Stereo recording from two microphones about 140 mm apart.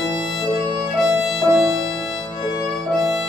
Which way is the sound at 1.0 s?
Centre (ahead or behind).